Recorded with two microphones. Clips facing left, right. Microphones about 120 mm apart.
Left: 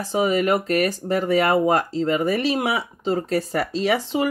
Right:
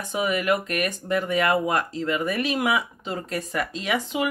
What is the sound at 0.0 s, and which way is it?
A woman's voice, 30° left (ahead or behind).